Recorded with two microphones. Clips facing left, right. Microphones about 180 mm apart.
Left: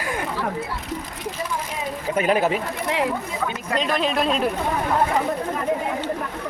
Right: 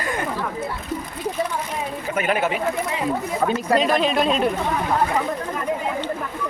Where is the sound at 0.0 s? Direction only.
5° left (ahead or behind).